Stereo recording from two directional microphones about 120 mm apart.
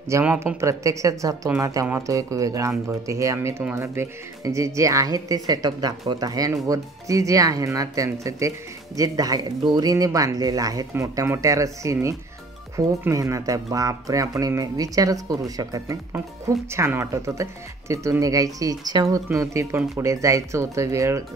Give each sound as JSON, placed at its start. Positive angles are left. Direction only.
{"t": 0.2, "sound": "speech", "side_deg": -10}
{"t": 0.6, "sound": "speech", "side_deg": -25}